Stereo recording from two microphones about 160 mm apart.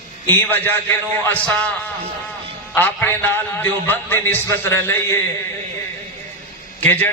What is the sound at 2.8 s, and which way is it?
A man's voice, 10° left (ahead or behind).